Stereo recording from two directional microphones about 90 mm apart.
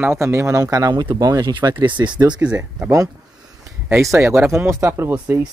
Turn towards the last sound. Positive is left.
turn(degrees=-15)  # may be behind; listen again after turning